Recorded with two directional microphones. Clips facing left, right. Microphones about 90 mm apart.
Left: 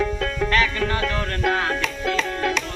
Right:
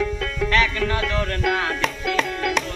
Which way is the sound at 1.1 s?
Centre (ahead or behind).